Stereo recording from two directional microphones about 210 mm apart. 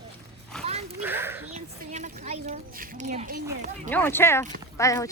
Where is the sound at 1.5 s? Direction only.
35° right (ahead or behind).